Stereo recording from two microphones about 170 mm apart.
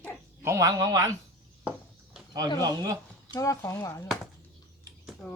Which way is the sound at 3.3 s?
20° left (ahead or behind).